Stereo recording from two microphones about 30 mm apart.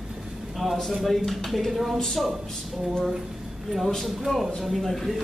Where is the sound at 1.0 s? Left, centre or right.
Centre.